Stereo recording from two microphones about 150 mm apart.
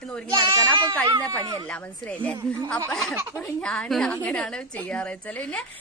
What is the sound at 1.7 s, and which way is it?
A woman's voice, 10° left (ahead or behind).